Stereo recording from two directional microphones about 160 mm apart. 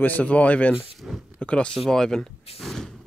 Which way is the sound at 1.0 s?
Centre (ahead or behind).